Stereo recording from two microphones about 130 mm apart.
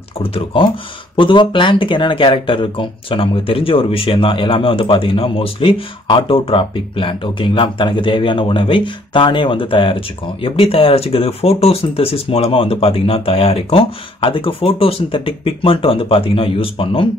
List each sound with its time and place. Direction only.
0.2 s speech: 45° left (ahead or behind)